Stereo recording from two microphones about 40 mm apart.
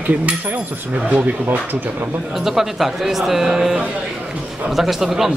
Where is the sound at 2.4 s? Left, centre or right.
Centre.